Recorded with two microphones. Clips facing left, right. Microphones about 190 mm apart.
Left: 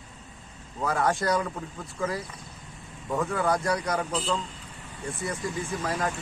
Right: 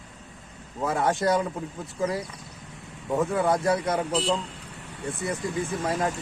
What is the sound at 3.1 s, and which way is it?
A man's voice, 20° right (ahead or behind).